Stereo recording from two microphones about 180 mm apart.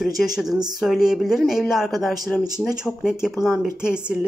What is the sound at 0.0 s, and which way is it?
Speech, centre (ahead or behind).